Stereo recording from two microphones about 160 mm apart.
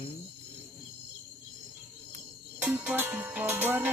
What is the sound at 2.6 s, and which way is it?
Music, 10° right (ahead or behind).